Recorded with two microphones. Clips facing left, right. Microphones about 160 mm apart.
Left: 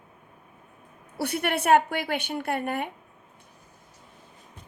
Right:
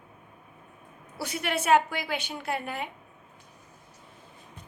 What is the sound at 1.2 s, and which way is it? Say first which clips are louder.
A woman's voice: left 4 dB; 60° left (ahead or behind).